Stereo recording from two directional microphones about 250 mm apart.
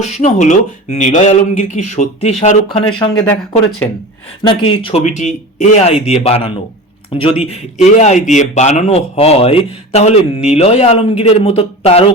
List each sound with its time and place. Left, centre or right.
0.0 s speech: left
4.4 s speech: left